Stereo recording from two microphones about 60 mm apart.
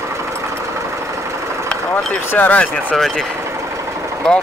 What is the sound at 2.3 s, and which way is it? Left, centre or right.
Speech, left.